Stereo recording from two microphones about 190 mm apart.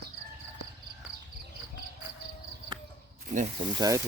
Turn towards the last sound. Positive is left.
turn(degrees=-20)  # may be behind; listen again after turning